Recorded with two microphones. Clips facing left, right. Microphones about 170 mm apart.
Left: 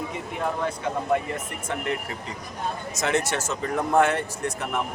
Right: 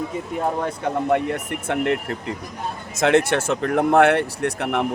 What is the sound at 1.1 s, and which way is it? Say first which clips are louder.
Speech: right 4 dB; 65° right (ahead or behind).